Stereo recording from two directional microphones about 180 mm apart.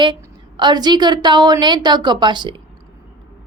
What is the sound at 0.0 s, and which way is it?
A woman's voice, 25° right (ahead or behind).